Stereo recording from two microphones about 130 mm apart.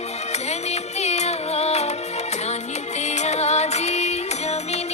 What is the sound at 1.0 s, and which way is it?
Music, 60° left (ahead or behind).